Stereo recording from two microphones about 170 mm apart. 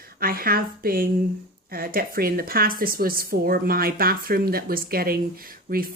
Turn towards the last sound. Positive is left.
turn(degrees=-60)  # may be behind; listen again after turning